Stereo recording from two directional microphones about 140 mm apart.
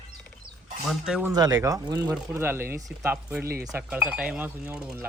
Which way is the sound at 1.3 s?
30° right (ahead or behind).